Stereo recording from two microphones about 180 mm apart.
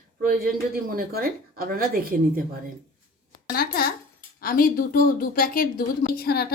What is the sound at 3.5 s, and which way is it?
A woman's voice, 55° left (ahead or behind).